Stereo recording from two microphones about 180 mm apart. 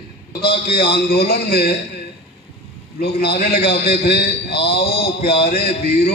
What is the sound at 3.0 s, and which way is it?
A man's voice, 60° left (ahead or behind).